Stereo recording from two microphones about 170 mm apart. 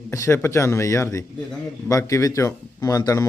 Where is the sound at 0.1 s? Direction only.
15° left (ahead or behind).